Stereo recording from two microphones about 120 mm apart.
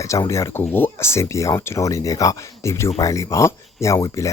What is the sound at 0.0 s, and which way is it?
Speech, 25° left (ahead or behind).